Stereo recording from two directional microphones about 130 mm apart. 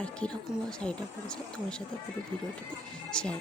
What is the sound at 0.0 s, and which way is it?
Speech, 10° left (ahead or behind).